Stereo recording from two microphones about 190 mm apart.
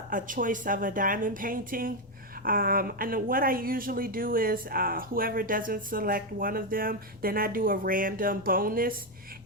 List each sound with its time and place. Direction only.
0.1 s a woman's voice: 45° right (ahead or behind)